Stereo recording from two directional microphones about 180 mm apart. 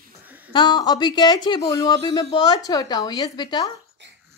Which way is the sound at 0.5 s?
25° left (ahead or behind).